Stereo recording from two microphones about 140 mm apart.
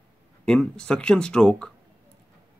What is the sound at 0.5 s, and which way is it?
Speech, 5° left (ahead or behind).